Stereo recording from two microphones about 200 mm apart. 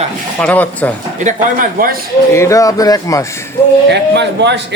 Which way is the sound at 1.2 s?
45° right (ahead or behind).